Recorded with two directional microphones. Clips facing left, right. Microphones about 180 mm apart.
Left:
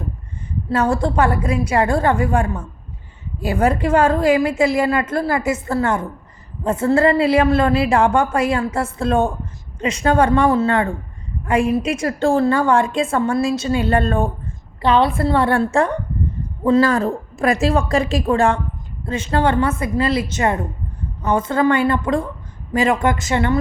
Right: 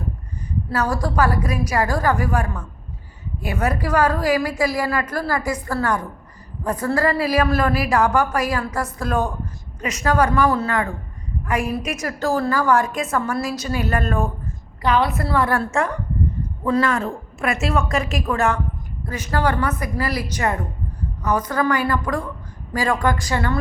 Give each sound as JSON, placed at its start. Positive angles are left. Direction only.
{"t": 0.7, "sound": "a woman's voice", "side_deg": 25}